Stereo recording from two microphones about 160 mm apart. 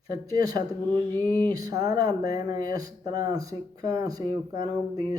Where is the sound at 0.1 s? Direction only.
20° right (ahead or behind).